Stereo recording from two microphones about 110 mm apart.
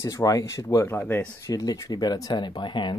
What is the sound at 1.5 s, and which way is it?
Speech, 30° left (ahead or behind).